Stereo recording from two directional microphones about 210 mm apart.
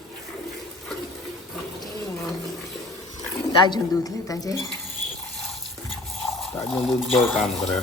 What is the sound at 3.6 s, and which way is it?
A woman's voice, 20° left (ahead or behind).